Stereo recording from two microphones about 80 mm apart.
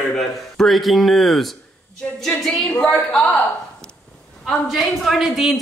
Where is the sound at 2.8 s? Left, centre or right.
Centre.